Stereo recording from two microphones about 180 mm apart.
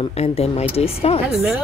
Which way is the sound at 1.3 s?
5° right (ahead or behind).